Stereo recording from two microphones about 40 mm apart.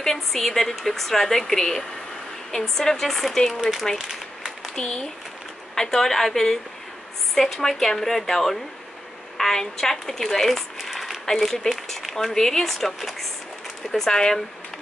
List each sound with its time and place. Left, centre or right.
0.0 s a woman's voice: centre
3.9 s a woman's voice: centre
10.8 s a sound: centre
11.4 s a woman's voice: centre
11.9 s a sound: centre
12.3 s a woman's voice: centre